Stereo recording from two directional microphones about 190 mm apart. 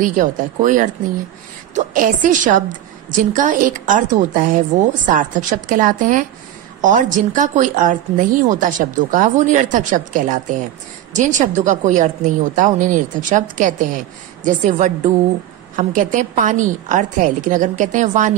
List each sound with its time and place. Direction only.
0.0 s a woman's voice: 45° right (ahead or behind)